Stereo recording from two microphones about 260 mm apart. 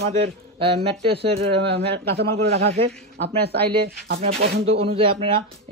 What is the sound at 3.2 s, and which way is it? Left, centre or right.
Speech, right.